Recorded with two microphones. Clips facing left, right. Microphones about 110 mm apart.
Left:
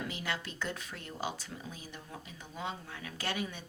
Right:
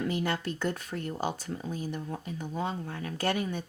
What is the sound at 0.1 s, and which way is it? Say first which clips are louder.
Speech: right 8 dB; 45° right (ahead or behind).